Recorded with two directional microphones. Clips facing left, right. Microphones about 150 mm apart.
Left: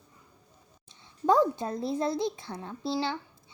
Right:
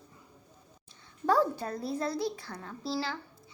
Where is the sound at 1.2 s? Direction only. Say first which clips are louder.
Left 3 dB; 20° left (ahead or behind).